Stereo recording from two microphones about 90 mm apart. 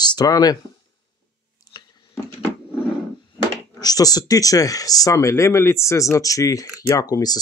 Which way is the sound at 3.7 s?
45° left (ahead or behind).